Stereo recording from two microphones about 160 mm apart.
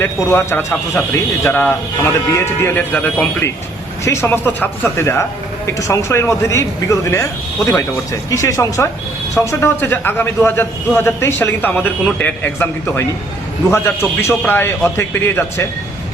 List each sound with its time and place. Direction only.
0.0 s a man's voice: 15° left (ahead or behind)